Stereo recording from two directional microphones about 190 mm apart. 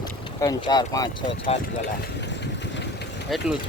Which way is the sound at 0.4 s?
20° left (ahead or behind).